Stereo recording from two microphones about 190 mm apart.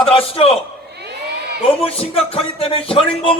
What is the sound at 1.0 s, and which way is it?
Crowd, 60° right (ahead or behind).